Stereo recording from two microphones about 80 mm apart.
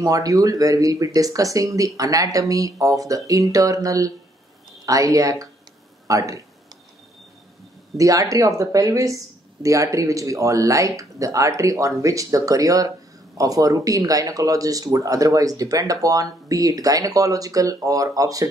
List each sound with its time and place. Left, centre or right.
0.0 s speech: right
8.0 s speech: right